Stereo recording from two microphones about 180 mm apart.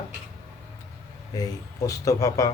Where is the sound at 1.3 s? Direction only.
20° left (ahead or behind).